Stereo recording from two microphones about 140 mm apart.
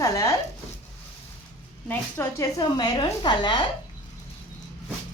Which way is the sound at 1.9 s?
15° left (ahead or behind).